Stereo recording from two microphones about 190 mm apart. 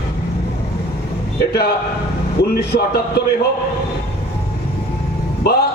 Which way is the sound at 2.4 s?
55° left (ahead or behind).